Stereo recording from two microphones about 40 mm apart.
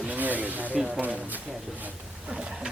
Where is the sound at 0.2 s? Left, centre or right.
Right.